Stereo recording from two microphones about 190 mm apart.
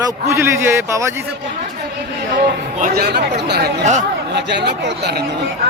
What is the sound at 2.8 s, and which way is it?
Speech, 55° right (ahead or behind).